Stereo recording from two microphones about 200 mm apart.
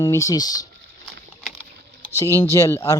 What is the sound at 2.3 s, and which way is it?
Speech, 15° left (ahead or behind).